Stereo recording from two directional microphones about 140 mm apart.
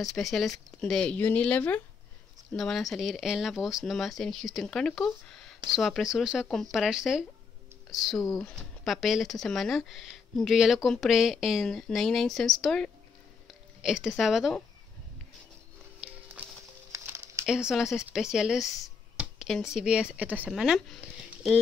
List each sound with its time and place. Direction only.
0.0 s speech: centre (ahead or behind)
16.0 s music: 5° right (ahead or behind)
16.9 s a sound: 20° right (ahead or behind)
17.5 s speech: 5° right (ahead or behind)
19.1 s a sound: centre (ahead or behind)
19.7 s speech: 5° right (ahead or behind)